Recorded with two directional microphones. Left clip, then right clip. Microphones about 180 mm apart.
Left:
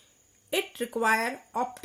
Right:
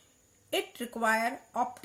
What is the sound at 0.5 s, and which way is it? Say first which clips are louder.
Speech: left 4 dB; 50° left (ahead or behind).